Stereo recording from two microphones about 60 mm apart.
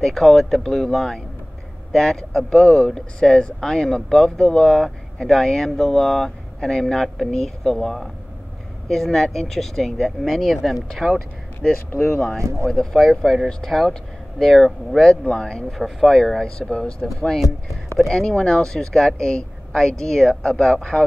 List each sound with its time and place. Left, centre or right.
0.0 s speech: centre
12.4 s speech: right
12.6 s speech: centre
15.7 s speech: centre